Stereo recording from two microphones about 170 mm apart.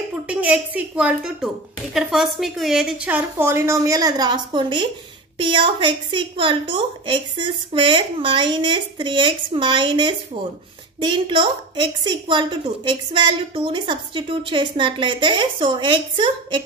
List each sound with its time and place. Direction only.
0.3 s a woman's voice: 10° right (ahead or behind); by 16.6 s 25° right (ahead or behind)